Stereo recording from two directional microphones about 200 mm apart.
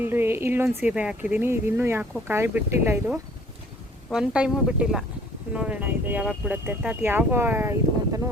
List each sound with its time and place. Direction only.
0.0 s speech: 10° right (ahead or behind)